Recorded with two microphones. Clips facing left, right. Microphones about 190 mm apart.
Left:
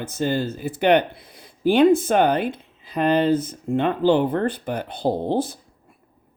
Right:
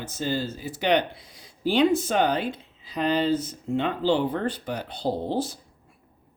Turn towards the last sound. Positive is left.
turn(degrees=55)  # may be behind; listen again after turning